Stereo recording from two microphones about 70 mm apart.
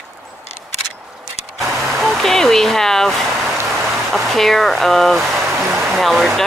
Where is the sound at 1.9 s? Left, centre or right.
Centre.